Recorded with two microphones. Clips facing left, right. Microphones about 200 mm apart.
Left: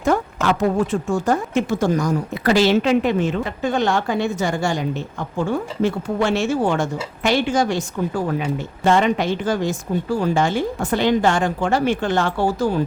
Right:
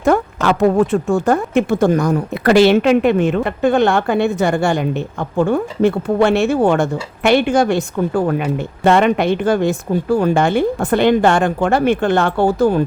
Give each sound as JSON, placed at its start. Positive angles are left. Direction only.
{"t": 0.0, "sound": "speech", "side_deg": -60}